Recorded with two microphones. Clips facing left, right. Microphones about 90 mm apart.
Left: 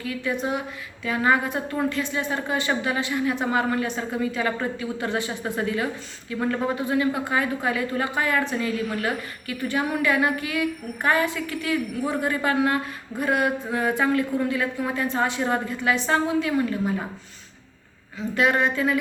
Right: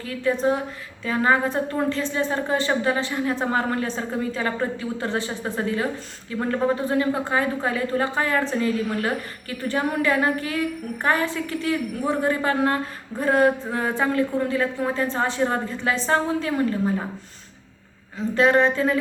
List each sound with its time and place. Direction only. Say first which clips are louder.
0.0 s a woman's voice: right 5 dB; 35° right (ahead or behind)
18.3 s a woman's voice: right 3 dB; 30° right (ahead or behind)